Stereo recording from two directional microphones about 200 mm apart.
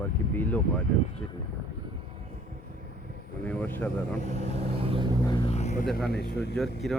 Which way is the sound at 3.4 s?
10° left (ahead or behind).